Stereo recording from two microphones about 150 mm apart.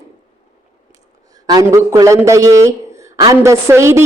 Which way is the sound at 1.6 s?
20° right (ahead or behind).